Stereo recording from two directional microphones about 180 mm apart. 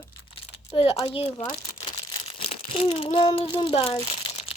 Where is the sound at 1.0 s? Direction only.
30° left (ahead or behind).